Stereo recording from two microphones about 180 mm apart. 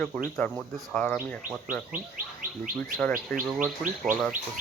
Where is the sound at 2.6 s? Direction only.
10° left (ahead or behind).